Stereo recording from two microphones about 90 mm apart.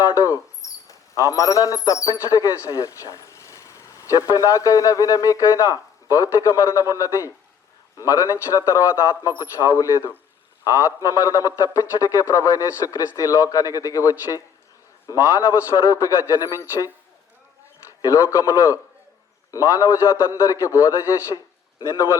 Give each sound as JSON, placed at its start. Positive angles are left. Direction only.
{"t": 0.1, "sound": "a man's voice", "side_deg": 35}
{"t": 18.0, "sound": "a man's voice", "side_deg": 40}